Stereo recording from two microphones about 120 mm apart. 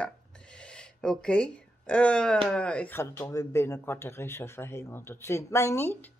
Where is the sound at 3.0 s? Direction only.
20° left (ahead or behind).